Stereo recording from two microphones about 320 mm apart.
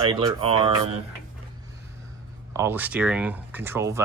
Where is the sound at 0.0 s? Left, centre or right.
Centre.